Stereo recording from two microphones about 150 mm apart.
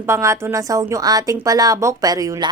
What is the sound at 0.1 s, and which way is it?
Speech, 20° right (ahead or behind).